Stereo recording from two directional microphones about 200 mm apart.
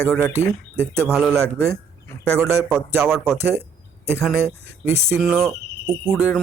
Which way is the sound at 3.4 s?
10° right (ahead or behind).